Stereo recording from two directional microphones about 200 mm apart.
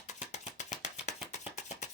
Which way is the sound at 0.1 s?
35° left (ahead or behind).